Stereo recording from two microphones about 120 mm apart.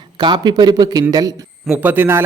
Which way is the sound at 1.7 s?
15° right (ahead or behind).